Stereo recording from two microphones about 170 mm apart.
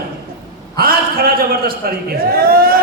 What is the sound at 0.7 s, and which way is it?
A man's voice, 60° right (ahead or behind).